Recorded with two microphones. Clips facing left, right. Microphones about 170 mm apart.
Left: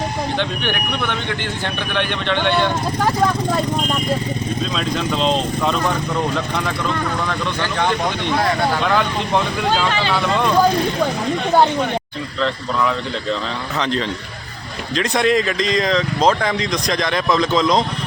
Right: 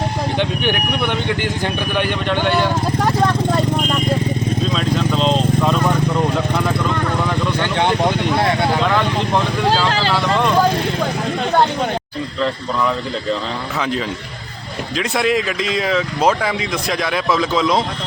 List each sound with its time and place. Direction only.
0.3 s speech: 15° right (ahead or behind)
4.7 s vehicle: centre (ahead or behind)
7.6 s speech: 25° right (ahead or behind)
8.8 s speech: centre (ahead or behind)
13.7 s speech: 5° right (ahead or behind)